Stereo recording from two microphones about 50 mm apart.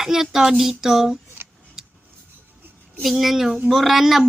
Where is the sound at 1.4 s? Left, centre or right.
Right.